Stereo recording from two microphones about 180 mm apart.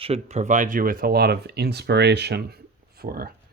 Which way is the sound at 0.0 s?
35° right (ahead or behind).